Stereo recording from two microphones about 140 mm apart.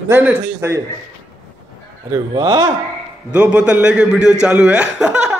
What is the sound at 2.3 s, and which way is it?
Speech, 30° right (ahead or behind).